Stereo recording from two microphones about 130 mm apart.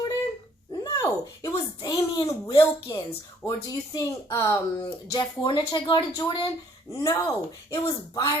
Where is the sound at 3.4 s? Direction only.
25° left (ahead or behind).